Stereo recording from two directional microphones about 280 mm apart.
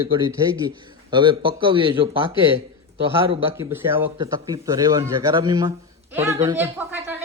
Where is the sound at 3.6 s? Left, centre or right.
Centre.